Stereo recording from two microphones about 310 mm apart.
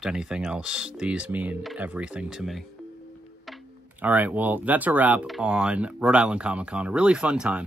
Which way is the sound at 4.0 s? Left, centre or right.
Centre.